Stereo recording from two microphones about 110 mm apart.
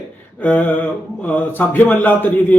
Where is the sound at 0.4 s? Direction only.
15° left (ahead or behind).